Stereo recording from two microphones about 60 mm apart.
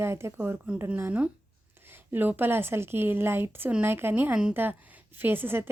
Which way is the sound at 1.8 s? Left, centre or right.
Right.